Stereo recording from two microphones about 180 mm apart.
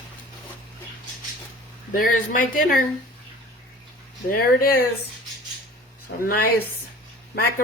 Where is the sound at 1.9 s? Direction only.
50° left (ahead or behind).